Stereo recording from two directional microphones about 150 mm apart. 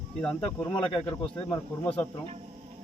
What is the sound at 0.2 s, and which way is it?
Speech, 10° left (ahead or behind).